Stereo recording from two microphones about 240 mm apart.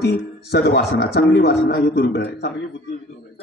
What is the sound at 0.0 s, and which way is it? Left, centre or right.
A man's voice, left.